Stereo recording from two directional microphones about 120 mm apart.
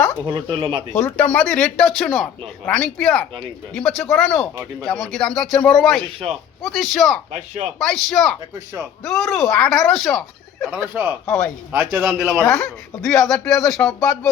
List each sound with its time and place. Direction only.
0.3 s speech: 40° right (ahead or behind)
0.9 s speech: 15° left (ahead or behind)
7.3 s speech: 80° right
8.1 s speech: 5° left (ahead or behind)
8.5 s speech: 25° right (ahead or behind)
9.0 s speech: centre (ahead or behind)
10.9 s a man's voice: 15° right (ahead or behind)
11.3 s speech: 10° left (ahead or behind)
11.7 s a man's voice: 15° right (ahead or behind)
12.5 s speech: 5° left (ahead or behind)